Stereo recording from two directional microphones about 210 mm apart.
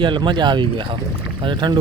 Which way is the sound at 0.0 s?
20° right (ahead or behind).